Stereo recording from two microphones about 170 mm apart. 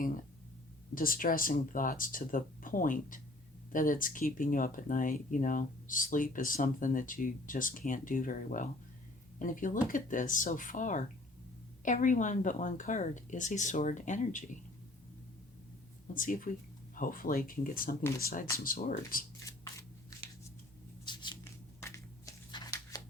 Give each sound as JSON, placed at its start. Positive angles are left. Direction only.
{"t": 0.9, "sound": "speech", "side_deg": 55}
{"t": 16.1, "sound": "speech", "side_deg": 55}
{"t": 21.0, "sound": "a sound", "side_deg": 25}
{"t": 21.8, "sound": "shuffling cards", "side_deg": 15}